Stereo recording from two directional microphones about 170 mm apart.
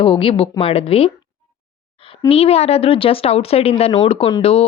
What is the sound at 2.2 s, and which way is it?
A woman's voice, 35° left (ahead or behind).